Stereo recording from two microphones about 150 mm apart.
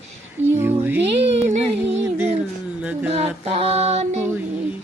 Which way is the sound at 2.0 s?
15° right (ahead or behind).